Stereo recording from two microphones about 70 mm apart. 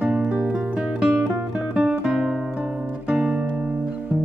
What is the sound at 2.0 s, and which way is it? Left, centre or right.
Guitar, centre.